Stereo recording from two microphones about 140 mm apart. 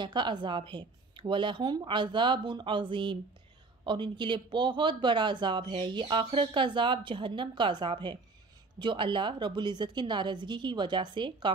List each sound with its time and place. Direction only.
0.0 s speech: 35° right (ahead or behind)